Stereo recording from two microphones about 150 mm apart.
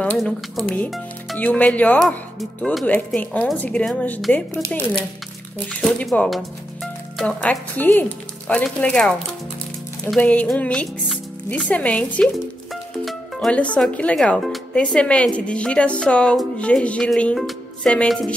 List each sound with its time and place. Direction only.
0.0 s speech: 5° left (ahead or behind)
5.7 s speech: 5° left (ahead or behind)
10.1 s speech: 10° left (ahead or behind)